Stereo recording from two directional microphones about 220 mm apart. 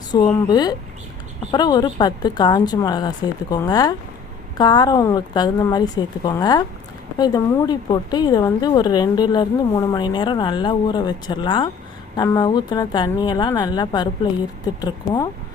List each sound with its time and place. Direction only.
0.1 s a woman's voice: 20° left (ahead or behind)